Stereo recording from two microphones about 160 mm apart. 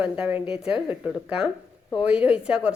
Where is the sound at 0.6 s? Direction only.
35° left (ahead or behind).